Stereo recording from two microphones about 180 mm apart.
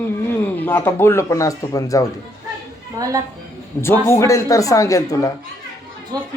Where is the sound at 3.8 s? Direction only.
15° left (ahead or behind).